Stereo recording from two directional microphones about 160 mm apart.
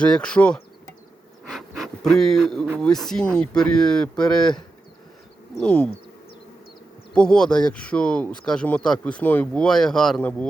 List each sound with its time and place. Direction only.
0.0 s speech: 5° left (ahead or behind)
1.5 s pant: centre (ahead or behind)
2.8 s speech: 5° left (ahead or behind)
5.5 s a sound: 5° left (ahead or behind)
7.1 s speech: 5° left (ahead or behind)